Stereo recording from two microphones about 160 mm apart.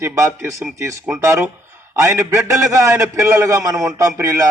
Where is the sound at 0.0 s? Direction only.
15° right (ahead or behind).